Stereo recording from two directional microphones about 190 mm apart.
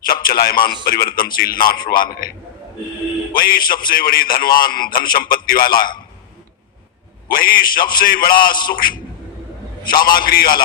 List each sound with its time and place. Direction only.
0.0 s a man's voice: 50° left (ahead or behind)
3.3 s a man's voice: 50° left (ahead or behind)
7.3 s a man's voice: 50° left (ahead or behind)
10.2 s a man's voice: 50° left (ahead or behind)